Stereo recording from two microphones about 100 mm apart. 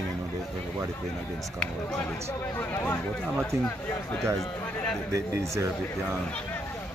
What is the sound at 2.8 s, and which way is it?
Speech, 15° left (ahead or behind).